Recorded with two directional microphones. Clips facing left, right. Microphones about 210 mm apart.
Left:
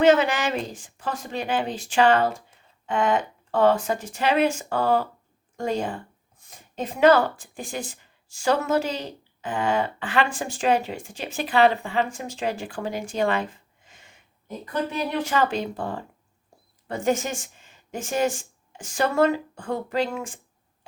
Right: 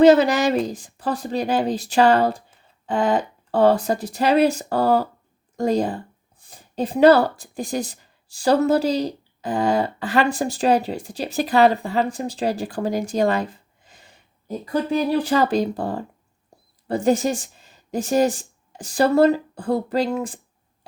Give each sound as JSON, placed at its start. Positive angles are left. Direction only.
{"t": 0.0, "sound": "speech", "side_deg": -35}